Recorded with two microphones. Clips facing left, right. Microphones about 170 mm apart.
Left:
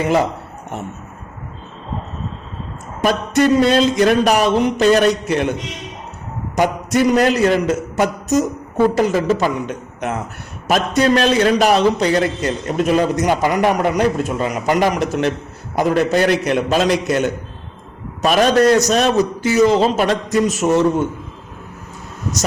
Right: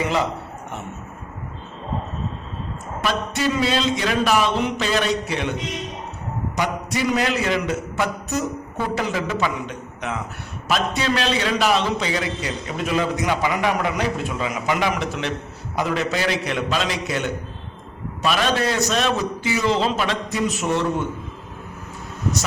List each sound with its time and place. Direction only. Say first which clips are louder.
3.0 s a man's voice: left 8 dB; 50° left (ahead or behind)
6.6 s a man's voice: left 8 dB; 50° left (ahead or behind)